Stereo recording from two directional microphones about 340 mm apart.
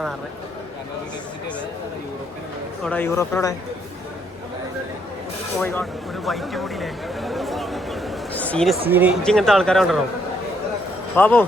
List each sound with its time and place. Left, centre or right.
2.8 s speech: centre
5.5 s a sound: centre
8.9 s speech: centre
11.2 s speech: centre